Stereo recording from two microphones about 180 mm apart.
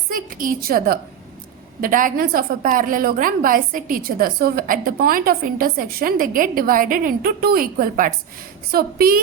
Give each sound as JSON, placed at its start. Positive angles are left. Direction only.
{"t": 0.1, "sound": "a woman's voice", "side_deg": -50}